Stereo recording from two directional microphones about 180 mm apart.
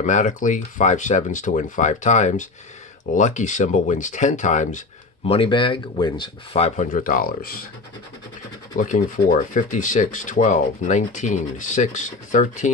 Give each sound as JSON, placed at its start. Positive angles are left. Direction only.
{"t": 0.0, "sound": "speech", "side_deg": 45}
{"t": 5.2, "sound": "speech", "side_deg": 30}
{"t": 8.7, "sound": "speech", "side_deg": 45}